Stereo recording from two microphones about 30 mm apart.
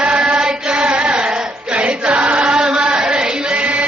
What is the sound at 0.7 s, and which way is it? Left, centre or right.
Carnatic music, right.